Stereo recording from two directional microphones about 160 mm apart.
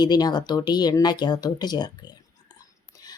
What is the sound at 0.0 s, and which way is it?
Speech, 25° left (ahead or behind).